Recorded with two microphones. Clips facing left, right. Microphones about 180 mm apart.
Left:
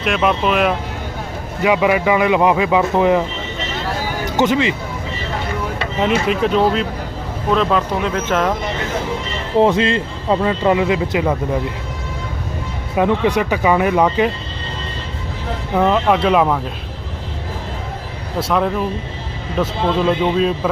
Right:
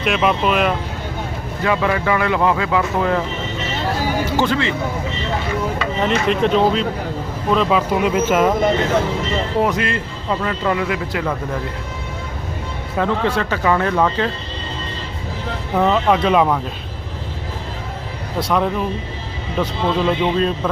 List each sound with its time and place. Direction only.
0.0 s speech: centre (ahead or behind)
1.6 s speech: 15° left (ahead or behind)
4.4 s speech: 20° left (ahead or behind)
6.0 s speech: 5° left (ahead or behind)
9.6 s speech: 25° left (ahead or behind)
13.0 s speech: 15° left (ahead or behind)
15.7 s speech: centre (ahead or behind)
18.4 s speech: centre (ahead or behind)